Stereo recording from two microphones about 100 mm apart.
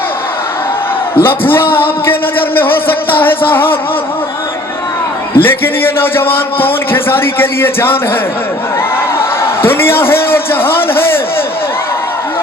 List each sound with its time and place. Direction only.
1.1 s a man's voice: 20° left (ahead or behind)
2.6 s music: 20° left (ahead or behind)
5.4 s a man's voice: 20° left (ahead or behind)
9.1 s a sound: 25° left (ahead or behind)